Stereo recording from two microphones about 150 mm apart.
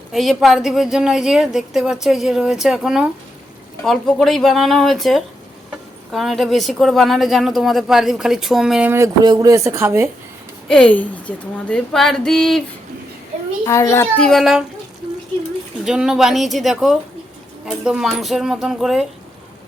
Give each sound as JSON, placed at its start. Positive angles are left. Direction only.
{"t": 0.1, "sound": "a woman's voice", "side_deg": 0}
{"t": 8.9, "sound": "speech", "side_deg": -25}
{"t": 10.7, "sound": "a woman's voice", "side_deg": 10}
{"t": 13.7, "sound": "a child's voice", "side_deg": 20}
{"t": 15.8, "sound": "a woman's voice", "side_deg": -5}